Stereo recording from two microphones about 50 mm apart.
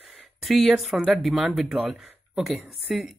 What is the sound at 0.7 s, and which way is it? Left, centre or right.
Speech, centre.